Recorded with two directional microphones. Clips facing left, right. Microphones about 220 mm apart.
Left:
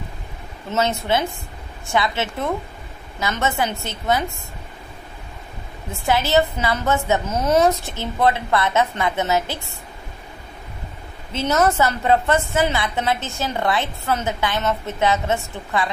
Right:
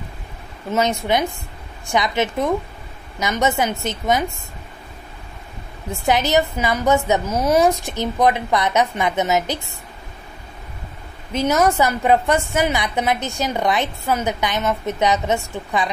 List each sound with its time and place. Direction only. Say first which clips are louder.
0.7 s a woman's voice: right 2 dB; 15° right (ahead or behind)
6.0 s a woman's voice: even; 15° right (ahead or behind)
11.3 s a woman's voice: right 2 dB; 10° right (ahead or behind)